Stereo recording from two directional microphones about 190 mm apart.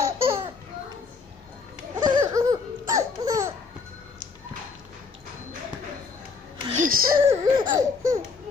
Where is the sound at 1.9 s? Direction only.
20° right (ahead or behind).